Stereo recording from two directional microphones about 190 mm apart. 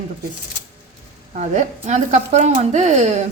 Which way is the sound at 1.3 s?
40° right (ahead or behind).